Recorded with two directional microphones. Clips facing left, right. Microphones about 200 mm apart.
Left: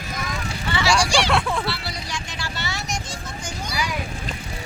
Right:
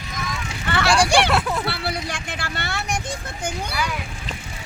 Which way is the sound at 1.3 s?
5° right (ahead or behind).